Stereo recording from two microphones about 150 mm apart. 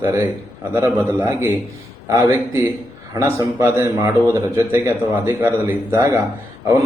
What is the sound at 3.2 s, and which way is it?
A man's voice, 20° right (ahead or behind).